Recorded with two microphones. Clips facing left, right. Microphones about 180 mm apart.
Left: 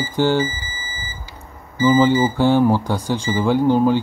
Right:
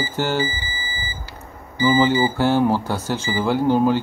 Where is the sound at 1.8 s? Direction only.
15° right (ahead or behind).